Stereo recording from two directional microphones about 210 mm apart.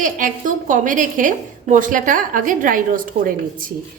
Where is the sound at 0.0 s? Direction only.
40° right (ahead or behind).